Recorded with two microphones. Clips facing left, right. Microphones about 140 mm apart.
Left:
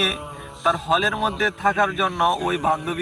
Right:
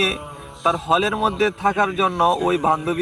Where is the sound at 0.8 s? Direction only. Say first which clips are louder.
Right 2 dB; 30° right (ahead or behind).